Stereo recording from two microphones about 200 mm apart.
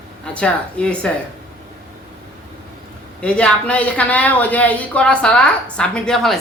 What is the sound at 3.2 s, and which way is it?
Speech, 5° left (ahead or behind).